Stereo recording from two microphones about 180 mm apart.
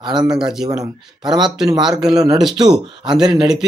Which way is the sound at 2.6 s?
25° right (ahead or behind).